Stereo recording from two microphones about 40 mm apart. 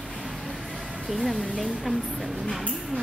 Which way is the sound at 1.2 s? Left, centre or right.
Centre.